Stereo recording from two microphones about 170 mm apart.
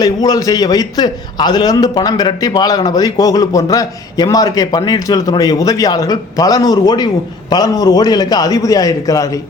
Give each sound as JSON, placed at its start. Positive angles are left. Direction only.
{"t": 0.0, "sound": "a man's voice", "side_deg": 25}